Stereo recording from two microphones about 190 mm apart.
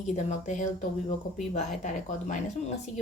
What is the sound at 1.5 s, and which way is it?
Speech, 40° left (ahead or behind).